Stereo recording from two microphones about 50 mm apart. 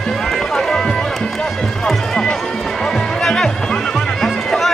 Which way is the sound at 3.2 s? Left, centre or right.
Centre.